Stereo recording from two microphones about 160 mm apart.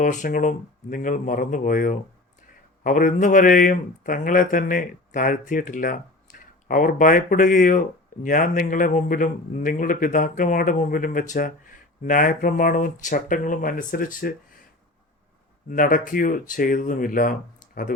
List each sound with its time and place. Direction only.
0.0 s speech: 50° left (ahead or behind)
15.7 s speech: 60° left (ahead or behind)